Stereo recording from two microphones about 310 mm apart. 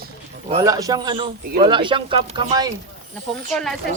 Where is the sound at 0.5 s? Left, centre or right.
Centre.